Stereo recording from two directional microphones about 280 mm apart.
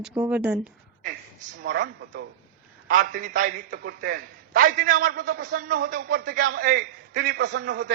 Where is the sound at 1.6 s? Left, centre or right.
Right.